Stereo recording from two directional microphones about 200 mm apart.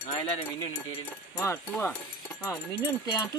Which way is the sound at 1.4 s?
5° left (ahead or behind).